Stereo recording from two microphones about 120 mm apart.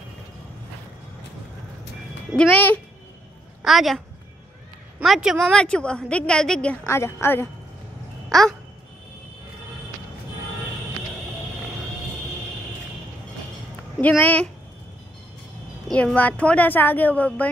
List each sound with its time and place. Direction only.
2.3 s speech: 10° left (ahead or behind)
3.6 s a woman's voice: centre (ahead or behind)
5.0 s speech: 5° right (ahead or behind)
6.9 s a woman's voice: 20° left (ahead or behind)
8.3 s speech: 5° left (ahead or behind)
14.0 s speech: 10° left (ahead or behind)
15.9 s speech: 10° left (ahead or behind)